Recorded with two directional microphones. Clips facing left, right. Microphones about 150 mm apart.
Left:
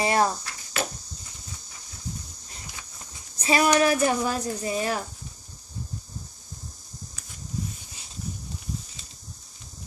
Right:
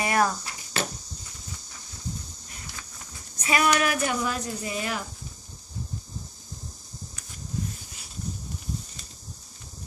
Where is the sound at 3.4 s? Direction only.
30° left (ahead or behind).